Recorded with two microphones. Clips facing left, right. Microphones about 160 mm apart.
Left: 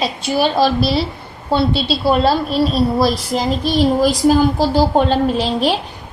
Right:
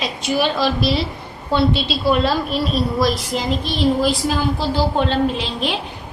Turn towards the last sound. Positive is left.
turn(degrees=40)  # may be behind; listen again after turning